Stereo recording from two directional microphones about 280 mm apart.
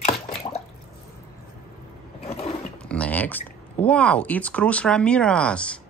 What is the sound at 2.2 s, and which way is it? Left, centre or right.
Mechanisms, left.